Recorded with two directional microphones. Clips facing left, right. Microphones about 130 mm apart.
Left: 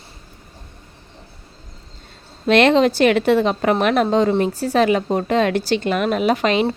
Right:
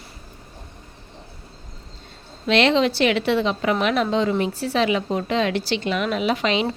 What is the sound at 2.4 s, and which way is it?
A woman's voice, 50° left (ahead or behind).